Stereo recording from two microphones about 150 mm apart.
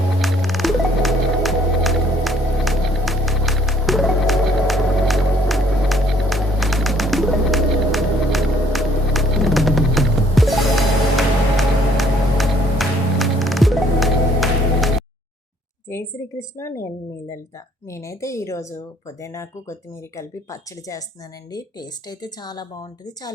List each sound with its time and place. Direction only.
0.2 s music: centre (ahead or behind)
15.9 s a woman's voice: 20° left (ahead or behind)